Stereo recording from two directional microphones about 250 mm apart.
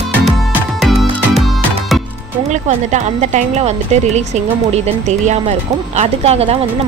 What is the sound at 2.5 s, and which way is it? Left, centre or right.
Speech, right.